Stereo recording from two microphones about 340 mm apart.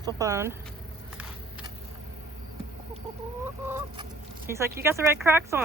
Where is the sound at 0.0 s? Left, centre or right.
Centre.